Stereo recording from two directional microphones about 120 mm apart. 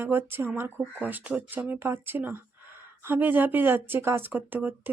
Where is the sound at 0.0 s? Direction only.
20° right (ahead or behind).